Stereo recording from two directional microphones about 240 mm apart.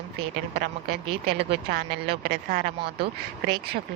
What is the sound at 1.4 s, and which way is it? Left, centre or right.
Speech, right.